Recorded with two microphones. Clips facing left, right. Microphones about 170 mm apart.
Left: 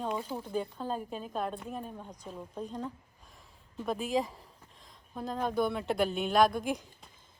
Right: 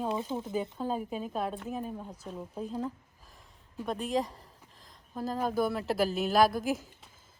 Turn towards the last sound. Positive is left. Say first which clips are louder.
# right 2 dB
turn(degrees=-5)  # may be behind; listen again after turning